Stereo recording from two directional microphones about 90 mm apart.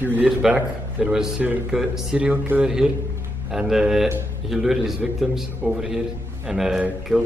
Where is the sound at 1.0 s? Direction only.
5° right (ahead or behind).